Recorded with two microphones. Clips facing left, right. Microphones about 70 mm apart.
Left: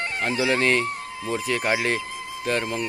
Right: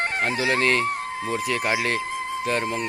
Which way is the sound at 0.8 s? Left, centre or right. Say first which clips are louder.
Right 4 dB; right.